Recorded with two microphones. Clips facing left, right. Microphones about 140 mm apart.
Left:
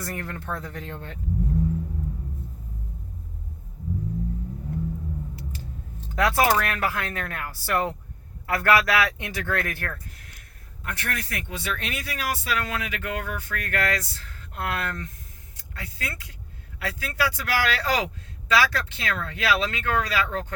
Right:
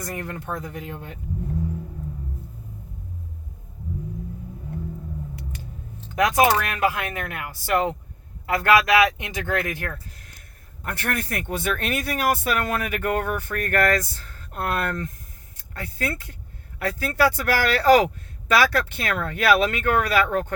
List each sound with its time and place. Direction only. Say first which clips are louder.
0.0 s speech: right 2 dB; 20° right (ahead or behind)
6.1 s speech: right 2 dB; 15° right (ahead or behind)
10.8 s speech: right 5 dB; 50° right (ahead or behind)